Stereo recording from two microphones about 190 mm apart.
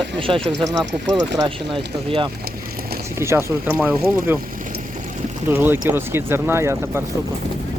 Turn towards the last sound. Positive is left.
turn(degrees=-15)  # may be behind; listen again after turning